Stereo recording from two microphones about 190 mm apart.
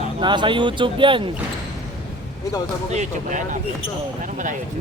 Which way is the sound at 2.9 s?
40° right (ahead or behind).